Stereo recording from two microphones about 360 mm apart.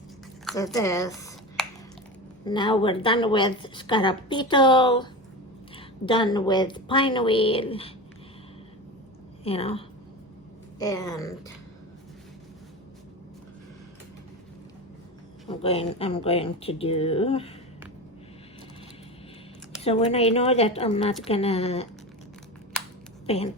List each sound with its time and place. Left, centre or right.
0.4 s a sound: centre
2.4 s a woman's voice: centre
9.4 s a woman's voice: centre
15.4 s a woman's voice: centre
19.8 s a woman's voice: centre
23.2 s speech: centre